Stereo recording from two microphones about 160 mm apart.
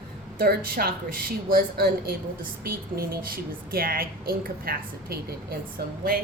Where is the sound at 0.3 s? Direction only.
65° right (ahead or behind).